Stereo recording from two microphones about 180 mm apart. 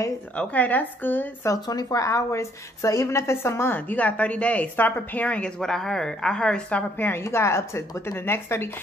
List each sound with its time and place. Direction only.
0.4 s a woman's voice: 10° left (ahead or behind)